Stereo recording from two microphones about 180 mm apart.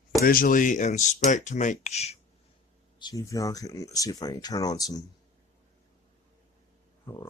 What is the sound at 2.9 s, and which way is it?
Speech, 20° left (ahead or behind).